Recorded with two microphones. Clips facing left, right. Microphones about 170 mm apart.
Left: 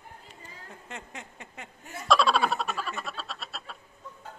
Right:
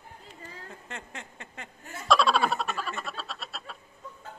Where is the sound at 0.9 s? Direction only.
15° left (ahead or behind).